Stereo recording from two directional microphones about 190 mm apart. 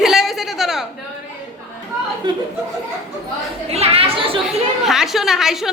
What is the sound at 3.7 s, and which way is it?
Speech, 30° right (ahead or behind).